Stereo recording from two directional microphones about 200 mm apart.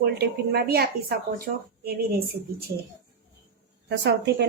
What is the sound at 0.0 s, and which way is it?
A woman's voice, 50° right (ahead or behind).